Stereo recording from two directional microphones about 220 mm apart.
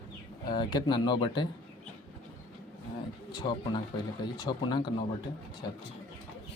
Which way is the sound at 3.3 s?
20° left (ahead or behind).